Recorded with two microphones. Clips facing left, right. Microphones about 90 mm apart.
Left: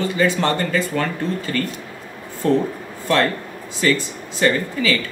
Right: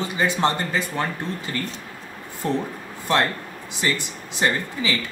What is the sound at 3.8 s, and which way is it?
Speech, 20° right (ahead or behind).